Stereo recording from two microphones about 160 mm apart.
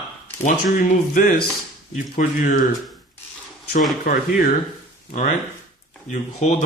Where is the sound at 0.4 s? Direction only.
55° left (ahead or behind).